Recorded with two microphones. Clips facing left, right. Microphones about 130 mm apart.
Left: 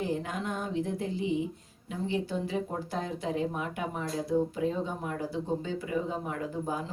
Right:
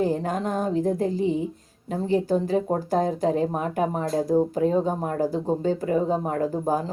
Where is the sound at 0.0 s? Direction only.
40° right (ahead or behind).